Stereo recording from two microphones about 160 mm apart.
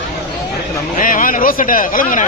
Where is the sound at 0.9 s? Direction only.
55° left (ahead or behind).